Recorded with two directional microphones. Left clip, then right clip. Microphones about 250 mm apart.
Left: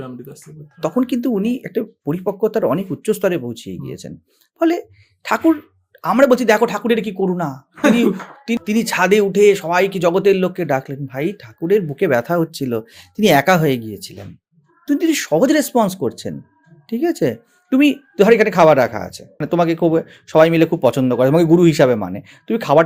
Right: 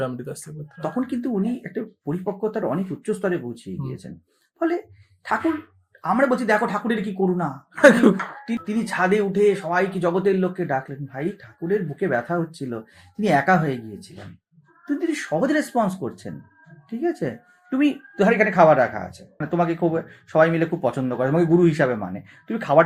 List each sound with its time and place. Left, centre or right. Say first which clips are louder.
0.0 s speech: right 5 dB; right
0.8 s speech: left 7 dB; left
6.0 s speech: left 7 dB; left
7.8 s speech: right 2 dB; right
8.6 s speech: left 5 dB; left